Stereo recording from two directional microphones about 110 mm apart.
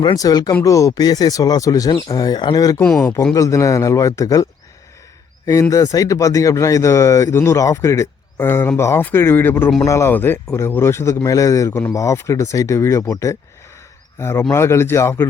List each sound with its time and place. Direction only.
0.0 s speech: 35° left (ahead or behind)
5.7 s speech: 35° left (ahead or behind)